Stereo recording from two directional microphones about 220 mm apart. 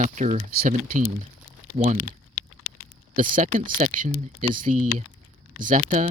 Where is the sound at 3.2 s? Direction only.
35° right (ahead or behind).